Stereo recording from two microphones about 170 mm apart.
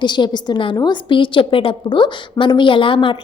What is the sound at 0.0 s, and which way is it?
A woman's voice, 25° left (ahead or behind).